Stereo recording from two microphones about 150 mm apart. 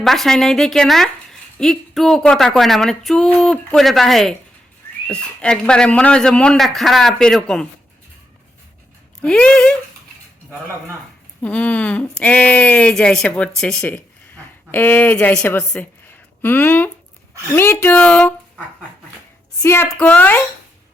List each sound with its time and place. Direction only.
0.0 s speech: centre (ahead or behind)
9.2 s speech: 5° left (ahead or behind)
11.4 s speech: 10° left (ahead or behind)
19.6 s speech: 15° left (ahead or behind)